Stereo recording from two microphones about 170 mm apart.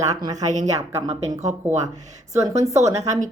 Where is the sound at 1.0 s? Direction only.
45° right (ahead or behind).